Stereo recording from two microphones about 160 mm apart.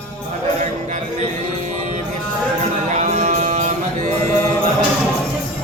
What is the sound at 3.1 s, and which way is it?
Music, 55° right (ahead or behind).